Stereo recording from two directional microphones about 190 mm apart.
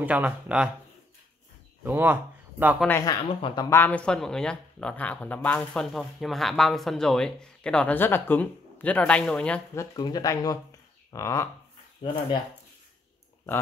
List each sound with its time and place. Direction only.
0.0 s speech: 5° right (ahead or behind)
1.9 s speech: 10° right (ahead or behind)
2.9 s speech: 20° left (ahead or behind)
3.7 s speech: 10° left (ahead or behind)
9.8 s speech: 20° left (ahead or behind)